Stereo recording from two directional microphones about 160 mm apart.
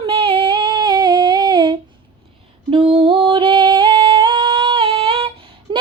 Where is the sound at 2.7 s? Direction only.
35° right (ahead or behind).